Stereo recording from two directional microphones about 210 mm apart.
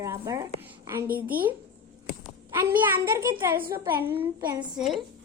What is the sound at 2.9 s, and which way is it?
A woman's voice, 15° right (ahead or behind).